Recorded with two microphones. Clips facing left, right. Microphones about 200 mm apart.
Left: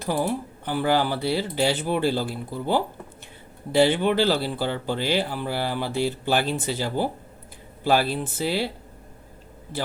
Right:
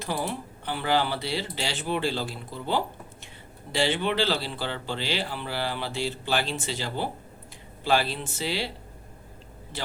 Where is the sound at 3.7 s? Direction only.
50° left (ahead or behind).